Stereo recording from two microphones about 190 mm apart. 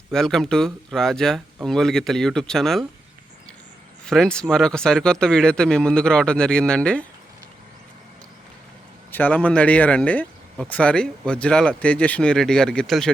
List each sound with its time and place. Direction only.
0.1 s speech: centre (ahead or behind)
4.0 s speech: 5° left (ahead or behind)
9.1 s speech: 10° left (ahead or behind)